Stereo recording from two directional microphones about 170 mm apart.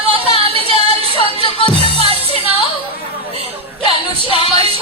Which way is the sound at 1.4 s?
30° left (ahead or behind).